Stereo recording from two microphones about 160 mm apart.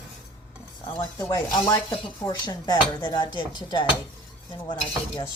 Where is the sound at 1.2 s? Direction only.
20° left (ahead or behind).